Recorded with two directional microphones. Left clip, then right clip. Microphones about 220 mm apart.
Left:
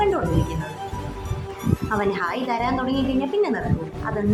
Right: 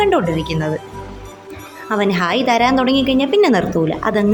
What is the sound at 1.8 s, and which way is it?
A woman's voice, 25° right (ahead or behind).